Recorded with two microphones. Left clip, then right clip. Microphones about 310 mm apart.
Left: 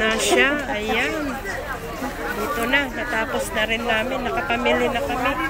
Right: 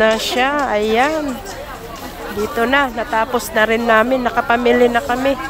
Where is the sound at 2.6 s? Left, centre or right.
Centre.